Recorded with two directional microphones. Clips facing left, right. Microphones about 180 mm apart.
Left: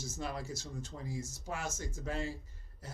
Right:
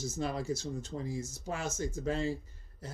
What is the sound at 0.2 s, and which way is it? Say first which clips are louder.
Speech: right 6 dB; 25° right (ahead or behind).